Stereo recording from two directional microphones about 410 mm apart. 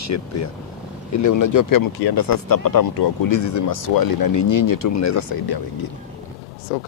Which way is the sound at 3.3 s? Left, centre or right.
Left.